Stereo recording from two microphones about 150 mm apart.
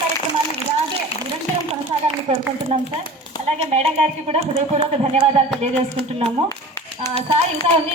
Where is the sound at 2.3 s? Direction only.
45° right (ahead or behind).